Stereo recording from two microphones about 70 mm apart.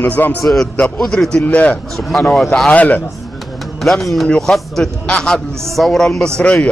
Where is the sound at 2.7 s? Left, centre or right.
Left.